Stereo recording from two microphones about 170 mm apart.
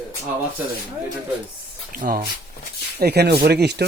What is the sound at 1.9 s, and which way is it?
Speech, 60° right (ahead or behind).